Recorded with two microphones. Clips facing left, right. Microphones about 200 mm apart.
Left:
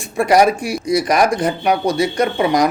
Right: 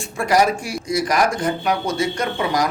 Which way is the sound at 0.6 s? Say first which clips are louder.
Left 6 dB; 25° right (ahead or behind).